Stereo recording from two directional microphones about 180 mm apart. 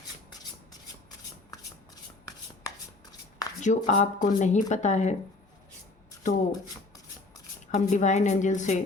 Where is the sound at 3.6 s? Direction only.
45° left (ahead or behind).